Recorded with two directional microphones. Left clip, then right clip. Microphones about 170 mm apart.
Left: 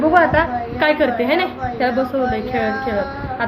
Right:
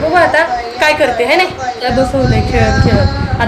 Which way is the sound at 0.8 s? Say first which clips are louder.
Right 5 dB; 5° left (ahead or behind).